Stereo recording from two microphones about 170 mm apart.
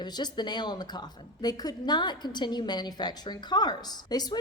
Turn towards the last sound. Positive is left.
turn(degrees=25)  # may be behind; listen again after turning